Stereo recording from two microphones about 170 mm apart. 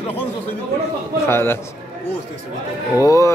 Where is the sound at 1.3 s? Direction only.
15° left (ahead or behind).